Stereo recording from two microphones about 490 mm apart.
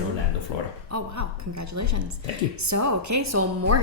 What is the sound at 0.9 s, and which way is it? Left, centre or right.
A woman's voice, right.